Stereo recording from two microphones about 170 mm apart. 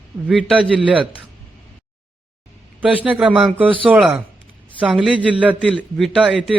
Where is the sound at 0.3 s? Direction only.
5° right (ahead or behind).